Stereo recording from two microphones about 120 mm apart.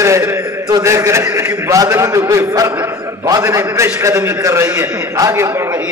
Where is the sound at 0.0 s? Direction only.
25° right (ahead or behind).